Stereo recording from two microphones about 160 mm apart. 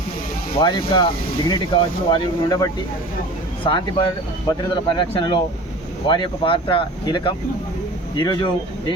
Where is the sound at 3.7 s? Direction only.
30° left (ahead or behind).